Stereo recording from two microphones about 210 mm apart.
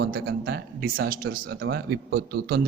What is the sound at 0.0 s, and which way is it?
A man's voice, 50° right (ahead or behind).